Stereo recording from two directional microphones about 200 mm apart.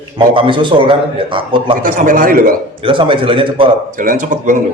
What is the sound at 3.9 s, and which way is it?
Speech, 40° right (ahead or behind).